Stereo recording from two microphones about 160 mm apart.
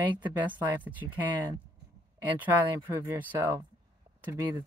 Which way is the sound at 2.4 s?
10° right (ahead or behind).